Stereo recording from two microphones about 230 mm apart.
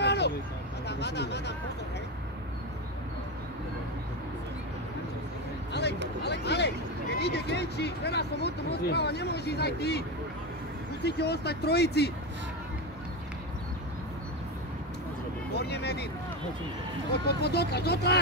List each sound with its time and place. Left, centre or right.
0.0 s vehicle: left
0.8 s speech: left
5.7 s a sound: left
6.2 s speech: left
11.1 s speech: left
15.5 s speech: left
17.3 s speech: left